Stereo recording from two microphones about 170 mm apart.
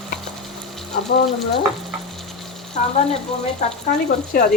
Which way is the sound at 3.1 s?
35° left (ahead or behind).